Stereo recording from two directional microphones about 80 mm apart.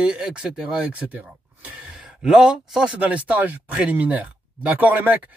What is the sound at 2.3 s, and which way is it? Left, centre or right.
Speech, centre.